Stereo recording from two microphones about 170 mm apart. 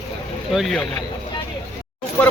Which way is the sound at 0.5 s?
Centre (ahead or behind).